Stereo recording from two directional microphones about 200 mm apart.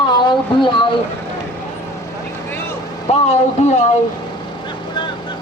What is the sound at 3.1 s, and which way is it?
Speech, 30° left (ahead or behind).